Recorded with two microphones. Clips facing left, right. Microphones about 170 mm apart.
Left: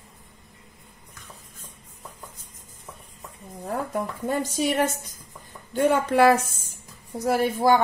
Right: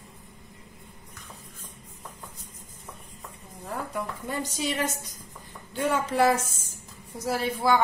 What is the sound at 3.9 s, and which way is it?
A woman's voice, 50° left (ahead or behind).